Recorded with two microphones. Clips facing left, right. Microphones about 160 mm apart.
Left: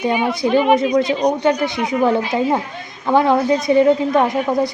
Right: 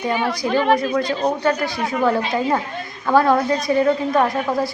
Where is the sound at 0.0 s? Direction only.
15° left (ahead or behind).